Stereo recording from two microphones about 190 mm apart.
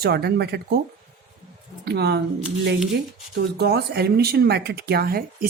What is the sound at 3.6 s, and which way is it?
Speech, 55° right (ahead or behind).